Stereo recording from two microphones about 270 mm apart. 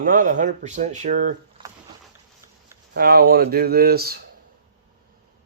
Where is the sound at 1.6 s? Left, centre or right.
Centre.